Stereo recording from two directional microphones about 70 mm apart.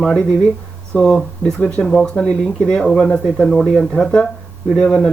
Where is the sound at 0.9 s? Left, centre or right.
Centre.